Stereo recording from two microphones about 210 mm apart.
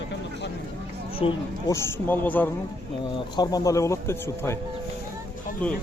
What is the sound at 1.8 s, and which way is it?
Speech, 10° left (ahead or behind).